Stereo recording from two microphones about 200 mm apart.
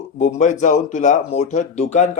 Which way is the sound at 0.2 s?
35° left (ahead or behind).